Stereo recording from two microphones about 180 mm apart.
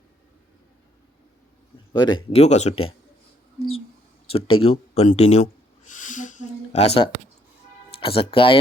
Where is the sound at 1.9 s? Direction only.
25° left (ahead or behind).